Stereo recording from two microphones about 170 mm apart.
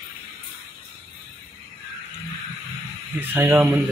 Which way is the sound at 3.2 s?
10° right (ahead or behind).